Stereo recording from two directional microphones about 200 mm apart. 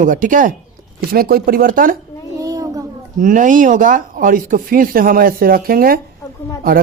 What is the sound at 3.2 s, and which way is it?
Speech, 40° right (ahead or behind).